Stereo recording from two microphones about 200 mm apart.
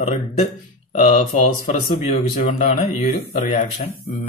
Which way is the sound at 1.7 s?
35° left (ahead or behind).